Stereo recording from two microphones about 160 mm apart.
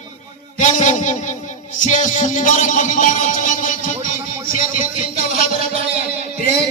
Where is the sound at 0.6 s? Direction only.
50° left (ahead or behind).